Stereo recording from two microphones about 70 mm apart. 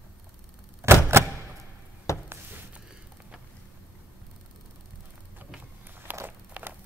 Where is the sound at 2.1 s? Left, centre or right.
Left.